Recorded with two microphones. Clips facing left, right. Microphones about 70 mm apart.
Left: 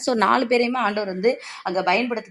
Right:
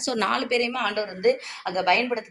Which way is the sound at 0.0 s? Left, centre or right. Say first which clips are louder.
Left 6 dB; left.